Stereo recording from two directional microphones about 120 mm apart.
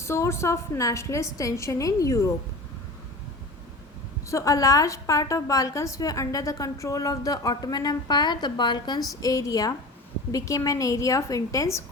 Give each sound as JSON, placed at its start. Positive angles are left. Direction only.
{"t": 0.0, "sound": "a woman's voice", "side_deg": 25}
{"t": 4.3, "sound": "a woman's voice", "side_deg": 25}